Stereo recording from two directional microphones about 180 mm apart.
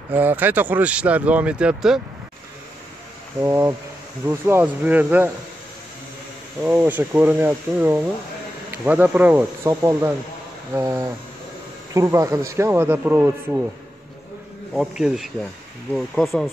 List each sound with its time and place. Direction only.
0.1 s speech: 10° right (ahead or behind)
3.3 s speech: 15° right (ahead or behind)
6.6 s speech: 10° right (ahead or behind)
14.7 s bee: centre (ahead or behind)